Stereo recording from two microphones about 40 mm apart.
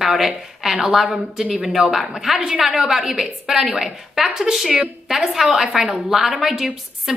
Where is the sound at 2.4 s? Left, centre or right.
Centre.